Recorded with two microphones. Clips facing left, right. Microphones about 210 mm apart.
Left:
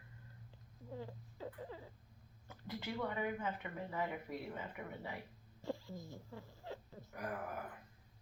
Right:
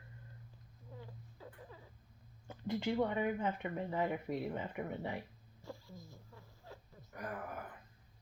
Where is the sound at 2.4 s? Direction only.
25° right (ahead or behind).